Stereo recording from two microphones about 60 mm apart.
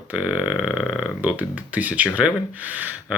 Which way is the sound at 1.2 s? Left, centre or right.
Right.